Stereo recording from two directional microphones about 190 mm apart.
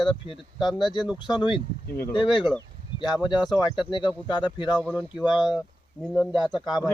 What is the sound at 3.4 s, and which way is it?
Speech, 5° right (ahead or behind).